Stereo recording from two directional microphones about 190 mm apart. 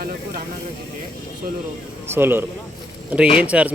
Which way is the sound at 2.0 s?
10° right (ahead or behind).